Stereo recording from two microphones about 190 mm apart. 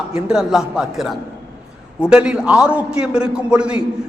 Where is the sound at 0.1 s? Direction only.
5° right (ahead or behind).